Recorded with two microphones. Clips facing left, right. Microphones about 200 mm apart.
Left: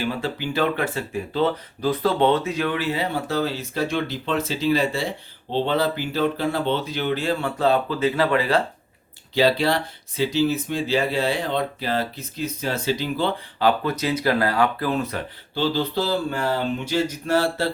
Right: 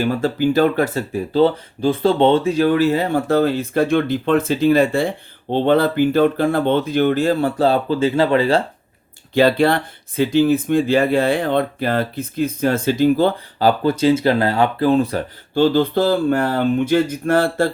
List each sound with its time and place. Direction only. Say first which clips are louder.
0.0 s speech: right 8 dB; 45° right (ahead or behind); by 8.6 s 30° right (ahead or behind)
9.3 s speech: right 5 dB; 55° right (ahead or behind); by 15.2 s 30° right (ahead or behind)
15.5 s speech: right 8 dB; 50° right (ahead or behind)